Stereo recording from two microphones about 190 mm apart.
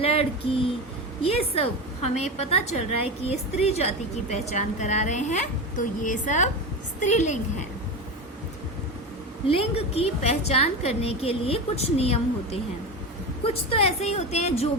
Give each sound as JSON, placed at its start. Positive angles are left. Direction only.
{"t": 0.0, "sound": "a sound", "side_deg": 30}
{"t": 1.2, "sound": "a woman's voice", "side_deg": 30}
{"t": 9.5, "sound": "a woman's voice", "side_deg": 30}